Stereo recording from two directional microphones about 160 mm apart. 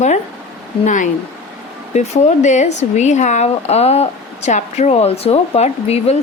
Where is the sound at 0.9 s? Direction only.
50° left (ahead or behind).